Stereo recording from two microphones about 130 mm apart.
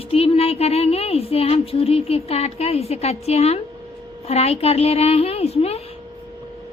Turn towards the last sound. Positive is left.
turn(degrees=50)  # may be behind; listen again after turning